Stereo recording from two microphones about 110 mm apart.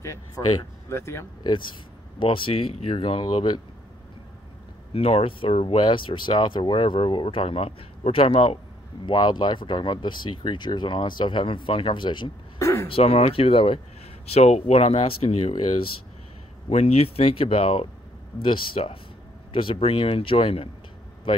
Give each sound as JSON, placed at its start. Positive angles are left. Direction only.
{"t": 0.4, "sound": "speech", "side_deg": 25}
{"t": 2.1, "sound": "speech", "side_deg": 50}
{"t": 4.9, "sound": "speech", "side_deg": 60}
{"t": 5.8, "sound": "speech", "side_deg": 50}
{"t": 8.3, "sound": "speech", "side_deg": 70}
{"t": 9.0, "sound": "speech", "side_deg": 40}
{"t": 12.5, "sound": "a sound", "side_deg": 30}
{"t": 12.8, "sound": "speech", "side_deg": 60}
{"t": 14.2, "sound": "speech", "side_deg": 70}
{"t": 16.6, "sound": "speech", "side_deg": 75}